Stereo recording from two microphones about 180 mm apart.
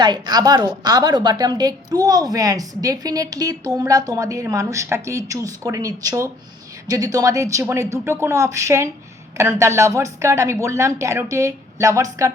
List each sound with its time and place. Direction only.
0.0 s a woman's voice: 25° right (ahead or behind)